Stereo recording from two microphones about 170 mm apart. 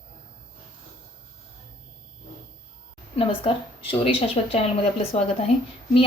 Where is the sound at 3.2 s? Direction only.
35° left (ahead or behind).